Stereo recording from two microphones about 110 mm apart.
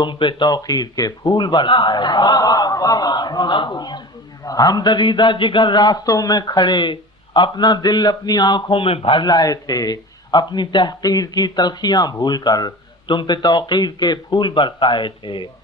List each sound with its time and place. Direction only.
0.0 s a man's voice: 45° left (ahead or behind)
9.2 s a man's voice: 35° left (ahead or behind)